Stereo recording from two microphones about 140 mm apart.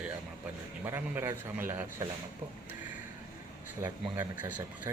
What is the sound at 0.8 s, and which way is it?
Speech, 15° right (ahead or behind).